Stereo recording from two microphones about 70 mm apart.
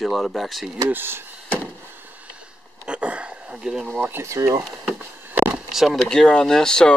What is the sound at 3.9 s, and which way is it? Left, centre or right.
Speech, right.